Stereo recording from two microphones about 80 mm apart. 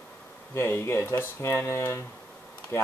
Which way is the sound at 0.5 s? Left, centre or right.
Left.